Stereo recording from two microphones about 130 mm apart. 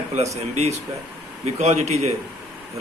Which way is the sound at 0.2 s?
55° right (ahead or behind).